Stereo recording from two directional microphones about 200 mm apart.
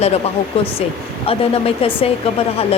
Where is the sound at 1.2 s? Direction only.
30° left (ahead or behind).